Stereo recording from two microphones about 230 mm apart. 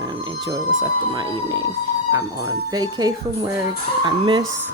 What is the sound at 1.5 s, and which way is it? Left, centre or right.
Speech, right.